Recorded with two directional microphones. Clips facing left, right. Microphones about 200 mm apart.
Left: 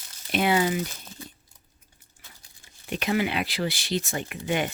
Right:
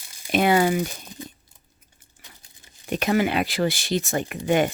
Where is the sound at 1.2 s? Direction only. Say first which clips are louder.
Right 6 dB; 20° right (ahead or behind).